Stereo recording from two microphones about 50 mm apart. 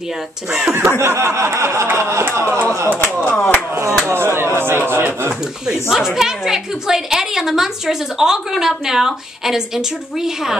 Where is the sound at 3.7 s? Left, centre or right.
Right.